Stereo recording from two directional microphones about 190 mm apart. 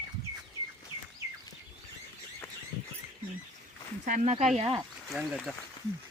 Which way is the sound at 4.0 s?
40° right (ahead or behind).